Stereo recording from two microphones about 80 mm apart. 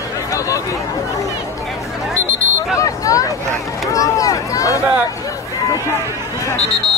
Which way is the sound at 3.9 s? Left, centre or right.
Left.